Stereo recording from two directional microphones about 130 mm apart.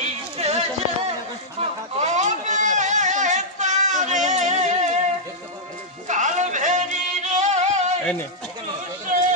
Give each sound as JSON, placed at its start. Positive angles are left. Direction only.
{"t": 0.4, "sound": "a sound", "side_deg": -55}
{"t": 6.0, "sound": "music", "side_deg": -70}
{"t": 8.0, "sound": "a man's voice", "side_deg": 10}